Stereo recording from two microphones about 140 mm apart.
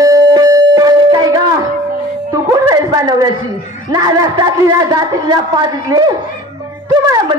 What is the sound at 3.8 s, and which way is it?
A man's voice, 25° right (ahead or behind).